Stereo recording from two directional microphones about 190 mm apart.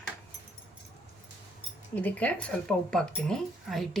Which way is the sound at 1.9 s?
10° left (ahead or behind).